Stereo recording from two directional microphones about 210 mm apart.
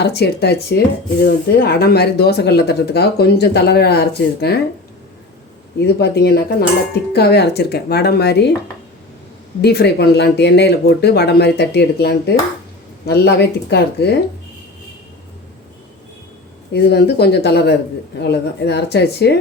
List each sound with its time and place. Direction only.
0.0 s speech: 50° left (ahead or behind)
5.8 s speech: 50° left (ahead or behind)
9.6 s speech: 50° left (ahead or behind)
16.7 s speech: 50° left (ahead or behind)